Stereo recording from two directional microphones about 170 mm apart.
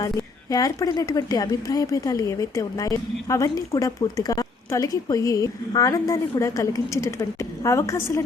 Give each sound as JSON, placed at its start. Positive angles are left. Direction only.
{"t": 0.0, "sound": "a woman's voice", "side_deg": 20}